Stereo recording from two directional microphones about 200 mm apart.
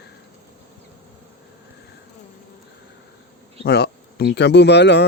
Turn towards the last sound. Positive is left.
turn(degrees=60)  # may be behind; listen again after turning